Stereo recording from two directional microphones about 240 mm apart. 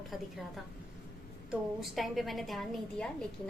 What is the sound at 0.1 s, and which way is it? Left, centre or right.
A woman's voice, centre.